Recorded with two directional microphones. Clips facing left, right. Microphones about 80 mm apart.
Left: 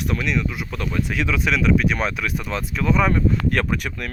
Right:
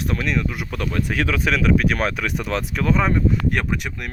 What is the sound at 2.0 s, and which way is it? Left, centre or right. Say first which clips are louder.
Speech: right 1 dB; right.